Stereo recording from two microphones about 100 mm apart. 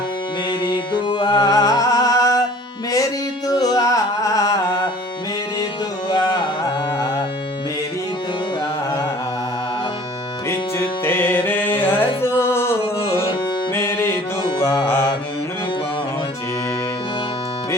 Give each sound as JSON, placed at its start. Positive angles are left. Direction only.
{"t": 0.6, "sound": "music", "side_deg": 55}
{"t": 6.1, "sound": "carnatic music", "side_deg": 55}
{"t": 10.5, "sound": "music", "side_deg": 25}